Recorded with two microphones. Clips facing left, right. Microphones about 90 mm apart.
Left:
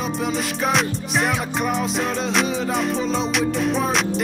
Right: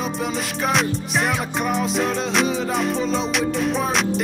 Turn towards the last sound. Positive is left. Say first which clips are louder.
# even
turn(degrees=0)  # may be behind; listen again after turning